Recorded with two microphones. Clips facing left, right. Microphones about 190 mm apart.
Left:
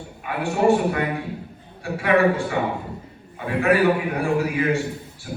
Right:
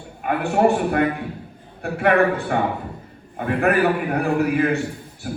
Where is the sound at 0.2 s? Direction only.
55° right (ahead or behind).